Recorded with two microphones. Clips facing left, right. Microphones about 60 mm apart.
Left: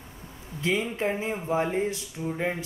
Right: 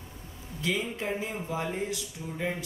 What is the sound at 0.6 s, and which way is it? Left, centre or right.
Speech, left.